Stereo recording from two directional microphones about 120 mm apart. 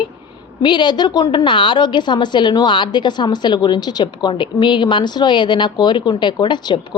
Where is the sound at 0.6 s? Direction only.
40° left (ahead or behind).